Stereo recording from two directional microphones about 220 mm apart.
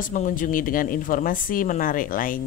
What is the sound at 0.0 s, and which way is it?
Speech, 35° left (ahead or behind).